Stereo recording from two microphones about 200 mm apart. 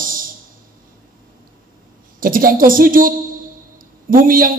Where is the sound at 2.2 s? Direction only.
45° right (ahead or behind).